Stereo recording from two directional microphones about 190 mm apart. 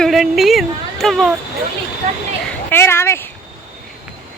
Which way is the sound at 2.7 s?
15° left (ahead or behind).